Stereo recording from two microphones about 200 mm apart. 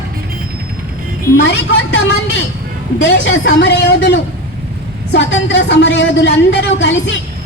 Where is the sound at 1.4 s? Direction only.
60° left (ahead or behind).